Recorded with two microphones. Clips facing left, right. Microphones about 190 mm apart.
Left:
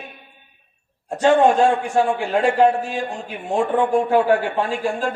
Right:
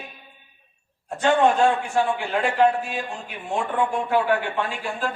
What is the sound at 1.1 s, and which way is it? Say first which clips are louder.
Speech: left 4 dB; 35° left (ahead or behind).